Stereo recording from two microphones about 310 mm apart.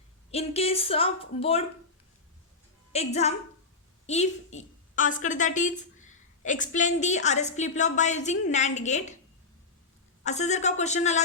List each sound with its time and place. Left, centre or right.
0.3 s a woman's voice: centre
2.9 s a woman's voice: centre
10.2 s a woman's voice: left